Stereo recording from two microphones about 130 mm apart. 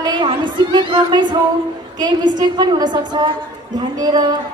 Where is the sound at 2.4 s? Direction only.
35° right (ahead or behind).